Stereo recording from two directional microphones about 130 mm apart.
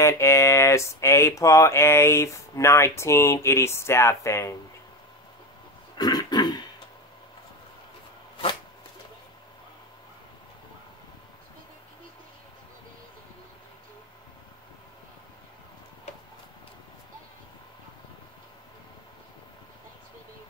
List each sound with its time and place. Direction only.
0.0 s speech: 20° left (ahead or behind)
5.9 s throat clearing: 30° left (ahead or behind)
16.1 s a sound: 55° left (ahead or behind)